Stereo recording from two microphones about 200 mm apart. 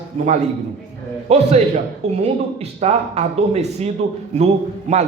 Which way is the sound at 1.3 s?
35° right (ahead or behind).